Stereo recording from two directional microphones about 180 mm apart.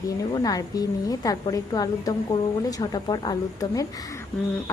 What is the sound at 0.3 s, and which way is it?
A woman's voice, 20° left (ahead or behind).